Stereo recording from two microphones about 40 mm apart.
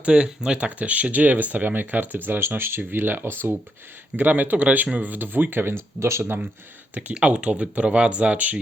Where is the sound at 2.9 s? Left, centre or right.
Right.